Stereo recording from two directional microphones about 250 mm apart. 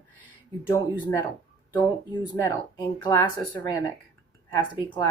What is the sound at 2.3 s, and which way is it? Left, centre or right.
Speech, centre.